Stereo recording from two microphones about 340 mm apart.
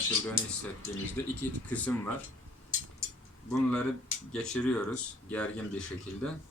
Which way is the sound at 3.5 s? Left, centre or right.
Centre.